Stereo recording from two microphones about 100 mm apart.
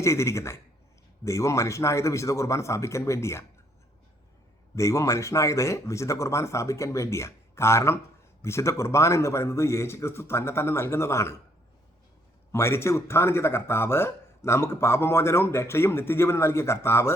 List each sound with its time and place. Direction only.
0.0 s speech: 30° left (ahead or behind)
4.7 s speech: 30° left (ahead or behind)
12.5 s speech: 25° left (ahead or behind)